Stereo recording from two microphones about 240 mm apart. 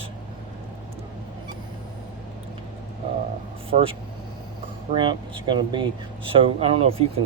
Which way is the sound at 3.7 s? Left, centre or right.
Right.